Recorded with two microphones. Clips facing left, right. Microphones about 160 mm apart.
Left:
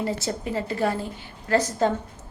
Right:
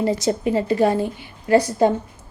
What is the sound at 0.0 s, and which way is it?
A woman's voice, 15° right (ahead or behind).